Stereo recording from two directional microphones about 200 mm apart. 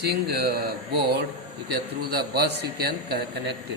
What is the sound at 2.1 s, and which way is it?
A man's voice, 55° right (ahead or behind).